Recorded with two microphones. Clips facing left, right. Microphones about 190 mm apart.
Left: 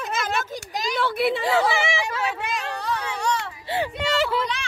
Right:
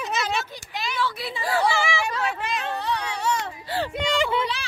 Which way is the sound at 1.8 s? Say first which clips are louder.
Even; 20° left (ahead or behind).